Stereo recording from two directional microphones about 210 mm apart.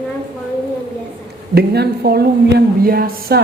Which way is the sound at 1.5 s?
50° right (ahead or behind).